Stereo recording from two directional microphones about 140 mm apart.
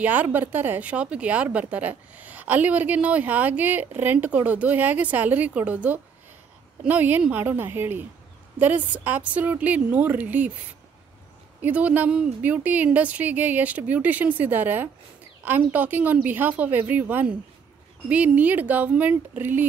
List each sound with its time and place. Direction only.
0.0 s speech: 10° right (ahead or behind)
11.6 s speech: 10° right (ahead or behind)